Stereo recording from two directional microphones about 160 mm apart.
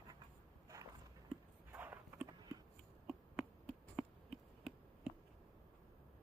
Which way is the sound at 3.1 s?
5° right (ahead or behind).